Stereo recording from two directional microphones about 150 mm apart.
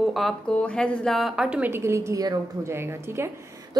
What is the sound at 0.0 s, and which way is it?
A woman's voice, centre (ahead or behind).